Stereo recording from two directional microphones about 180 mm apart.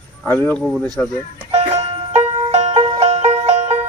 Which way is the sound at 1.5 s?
35° right (ahead or behind).